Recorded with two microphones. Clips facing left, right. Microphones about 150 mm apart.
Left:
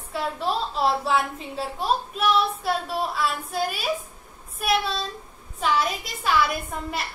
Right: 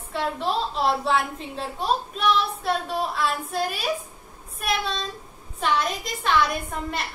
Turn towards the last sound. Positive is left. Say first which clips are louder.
# right 1 dB
turn(degrees=0)  # may be behind; listen again after turning